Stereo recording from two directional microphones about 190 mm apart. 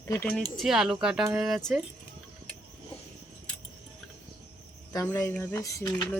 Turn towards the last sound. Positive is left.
turn(degrees=15)  # may be behind; listen again after turning